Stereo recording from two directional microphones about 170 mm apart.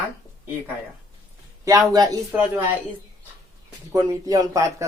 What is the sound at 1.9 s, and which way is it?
Speech, 20° right (ahead or behind).